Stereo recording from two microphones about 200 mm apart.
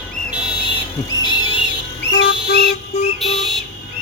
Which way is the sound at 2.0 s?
55° left (ahead or behind).